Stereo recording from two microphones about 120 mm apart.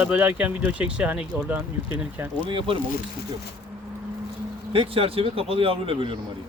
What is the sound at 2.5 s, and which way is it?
Speech, 45° right (ahead or behind).